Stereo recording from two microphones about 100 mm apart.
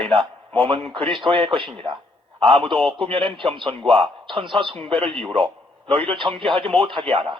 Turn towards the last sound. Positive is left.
turn(degrees=-60)  # may be behind; listen again after turning